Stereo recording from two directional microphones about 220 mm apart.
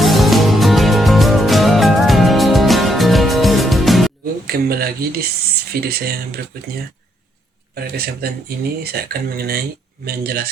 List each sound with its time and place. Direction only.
0.0 s music: centre (ahead or behind)
4.4 s speech: 45° right (ahead or behind)
7.8 s speech: 45° right (ahead or behind)